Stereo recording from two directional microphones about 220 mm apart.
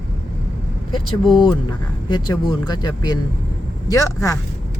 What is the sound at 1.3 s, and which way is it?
Speech, 20° left (ahead or behind).